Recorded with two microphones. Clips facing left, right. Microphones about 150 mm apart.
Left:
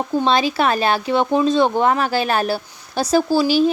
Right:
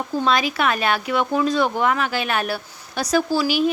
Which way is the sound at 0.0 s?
25° left (ahead or behind).